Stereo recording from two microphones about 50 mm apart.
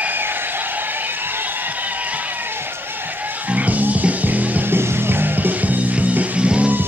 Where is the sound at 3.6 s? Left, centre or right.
Right.